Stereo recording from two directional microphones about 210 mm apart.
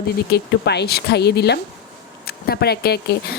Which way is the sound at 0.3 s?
50° left (ahead or behind).